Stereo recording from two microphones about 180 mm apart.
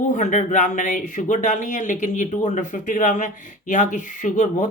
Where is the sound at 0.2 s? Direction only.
45° left (ahead or behind).